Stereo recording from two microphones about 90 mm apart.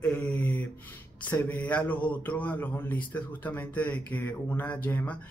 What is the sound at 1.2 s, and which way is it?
A man's voice, 20° left (ahead or behind).